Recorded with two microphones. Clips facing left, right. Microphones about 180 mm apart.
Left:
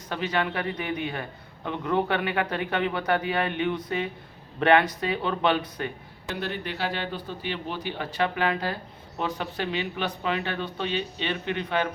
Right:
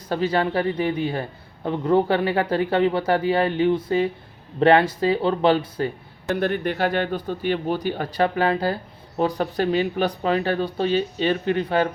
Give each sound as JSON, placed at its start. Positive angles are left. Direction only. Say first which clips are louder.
{"t": 0.1, "sound": "a man's voice", "louder": "right 6 dB", "side_deg": -35}
{"t": 6.3, "sound": "a man's voice", "louder": "right 9 dB", "side_deg": -50}